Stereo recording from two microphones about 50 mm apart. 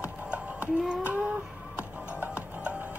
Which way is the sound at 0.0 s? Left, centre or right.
Right.